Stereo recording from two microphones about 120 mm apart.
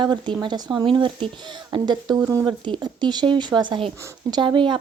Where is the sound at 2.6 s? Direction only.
40° right (ahead or behind).